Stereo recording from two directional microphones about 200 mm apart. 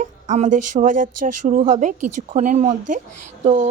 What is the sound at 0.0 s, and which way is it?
A woman's voice, 35° right (ahead or behind).